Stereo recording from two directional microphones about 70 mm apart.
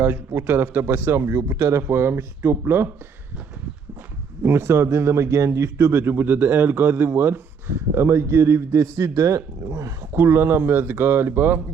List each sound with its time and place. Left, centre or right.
0.0 s speech: right
4.4 s speech: right
10.2 s speech: right